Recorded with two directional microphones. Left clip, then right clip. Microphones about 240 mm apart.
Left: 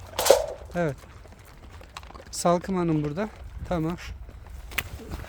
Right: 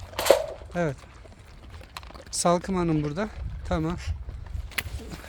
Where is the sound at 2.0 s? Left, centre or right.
Right.